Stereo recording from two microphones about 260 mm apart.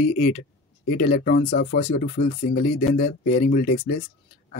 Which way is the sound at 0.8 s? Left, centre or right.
Left.